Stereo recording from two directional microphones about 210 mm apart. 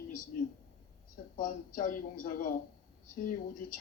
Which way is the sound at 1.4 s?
40° left (ahead or behind).